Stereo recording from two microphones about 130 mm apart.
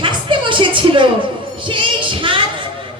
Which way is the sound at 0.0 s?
40° right (ahead or behind).